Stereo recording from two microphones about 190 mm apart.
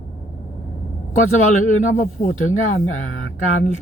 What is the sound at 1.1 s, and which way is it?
Speech, 40° left (ahead or behind).